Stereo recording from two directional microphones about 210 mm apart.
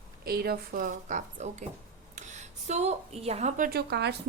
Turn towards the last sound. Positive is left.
turn(degrees=-50)  # may be behind; listen again after turning